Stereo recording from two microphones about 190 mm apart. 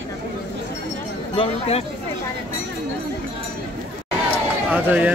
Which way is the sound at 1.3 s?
30° left (ahead or behind).